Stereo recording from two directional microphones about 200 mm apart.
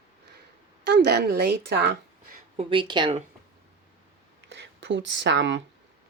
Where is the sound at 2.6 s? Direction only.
25° right (ahead or behind).